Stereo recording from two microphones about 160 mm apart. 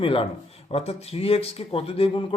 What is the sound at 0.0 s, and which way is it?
Speech, 35° left (ahead or behind).